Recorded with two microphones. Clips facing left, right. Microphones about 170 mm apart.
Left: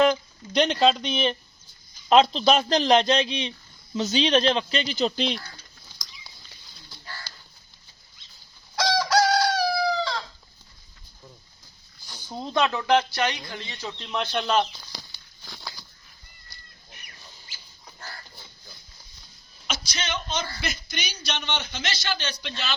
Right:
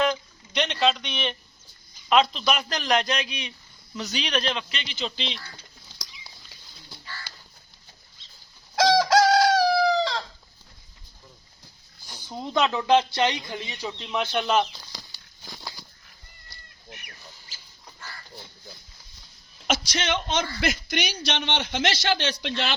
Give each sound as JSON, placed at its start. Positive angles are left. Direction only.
{"t": 0.1, "sound": "speech", "side_deg": 35}
{"t": 8.8, "sound": "chicken", "side_deg": -45}
{"t": 12.5, "sound": "speech", "side_deg": -20}
{"t": 15.4, "sound": "a sound", "side_deg": -10}
{"t": 19.6, "sound": "a man's voice", "side_deg": -75}